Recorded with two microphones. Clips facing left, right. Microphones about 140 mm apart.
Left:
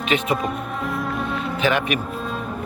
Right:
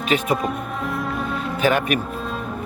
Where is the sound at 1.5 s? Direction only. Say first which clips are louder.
Right 2 dB; 45° right (ahead or behind).